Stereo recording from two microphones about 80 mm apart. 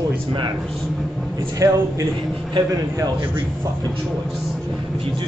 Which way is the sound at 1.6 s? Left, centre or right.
Right.